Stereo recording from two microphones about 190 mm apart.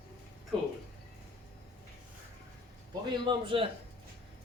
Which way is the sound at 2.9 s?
25° right (ahead or behind).